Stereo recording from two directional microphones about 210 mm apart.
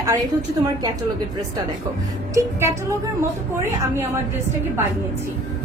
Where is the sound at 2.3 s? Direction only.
15° right (ahead or behind).